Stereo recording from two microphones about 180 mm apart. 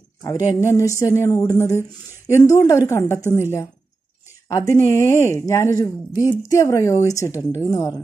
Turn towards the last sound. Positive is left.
turn(degrees=20)  # may be behind; listen again after turning